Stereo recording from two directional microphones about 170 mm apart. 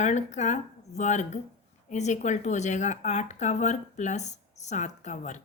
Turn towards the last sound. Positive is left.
turn(degrees=45)  # may be behind; listen again after turning